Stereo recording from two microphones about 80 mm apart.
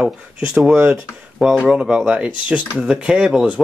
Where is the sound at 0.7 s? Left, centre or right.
Centre.